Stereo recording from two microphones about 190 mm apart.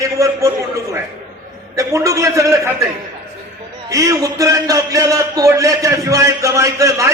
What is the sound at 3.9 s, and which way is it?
A man's voice, 15° right (ahead or behind).